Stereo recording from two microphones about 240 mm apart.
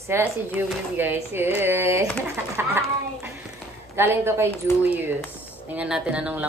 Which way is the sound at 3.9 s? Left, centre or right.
Centre.